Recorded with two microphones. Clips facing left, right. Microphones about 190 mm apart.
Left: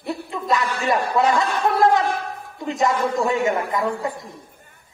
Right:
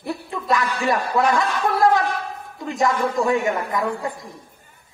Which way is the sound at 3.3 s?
20° left (ahead or behind).